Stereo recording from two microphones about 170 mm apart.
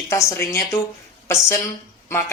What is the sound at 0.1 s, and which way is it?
A woman's voice, 15° left (ahead or behind).